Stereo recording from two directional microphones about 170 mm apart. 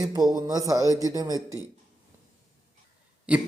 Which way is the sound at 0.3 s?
20° right (ahead or behind).